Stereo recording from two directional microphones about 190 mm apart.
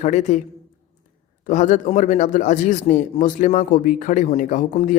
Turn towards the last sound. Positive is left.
turn(degrees=40)  # may be behind; listen again after turning